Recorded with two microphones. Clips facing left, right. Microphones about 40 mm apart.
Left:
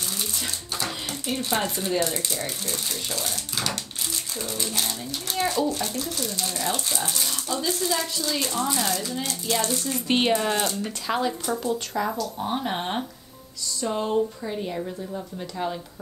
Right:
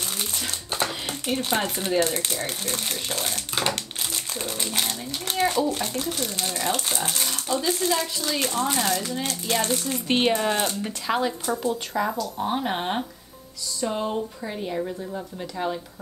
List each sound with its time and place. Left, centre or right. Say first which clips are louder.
0.8 s a sound: right 1 dB; right
2.0 s a child's voice: right 5 dB; right
9.8 s speech: left 1 dB; centre
10.6 s speech: even; right
11.1 s speech: right 1 dB; centre